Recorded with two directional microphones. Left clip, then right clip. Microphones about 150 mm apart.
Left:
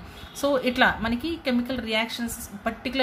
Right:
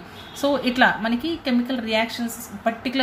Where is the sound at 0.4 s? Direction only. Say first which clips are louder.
Right 2 dB; 25° left (ahead or behind).